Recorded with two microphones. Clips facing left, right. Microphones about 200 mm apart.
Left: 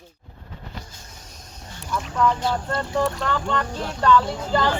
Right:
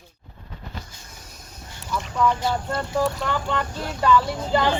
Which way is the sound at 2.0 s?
Centre (ahead or behind).